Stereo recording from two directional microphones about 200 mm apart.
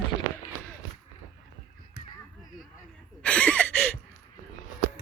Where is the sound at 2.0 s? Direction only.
55° left (ahead or behind).